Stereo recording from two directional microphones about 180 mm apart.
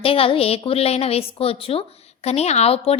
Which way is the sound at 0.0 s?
30° left (ahead or behind).